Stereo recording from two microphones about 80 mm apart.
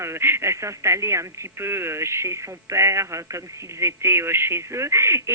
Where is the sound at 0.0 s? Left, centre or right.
Right.